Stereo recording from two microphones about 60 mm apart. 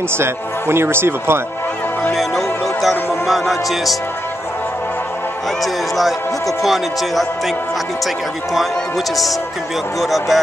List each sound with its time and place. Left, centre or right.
0.2 s a man's voice: right
2.1 s music: centre
5.6 s music: centre
9.9 s music: centre